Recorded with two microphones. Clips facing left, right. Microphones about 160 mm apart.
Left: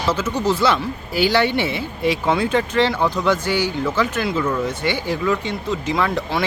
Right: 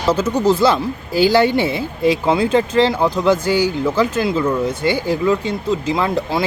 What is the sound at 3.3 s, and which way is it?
Speech, 10° right (ahead or behind).